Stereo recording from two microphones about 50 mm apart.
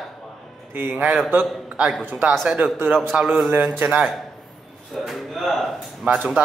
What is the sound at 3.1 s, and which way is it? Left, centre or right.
Speech, right.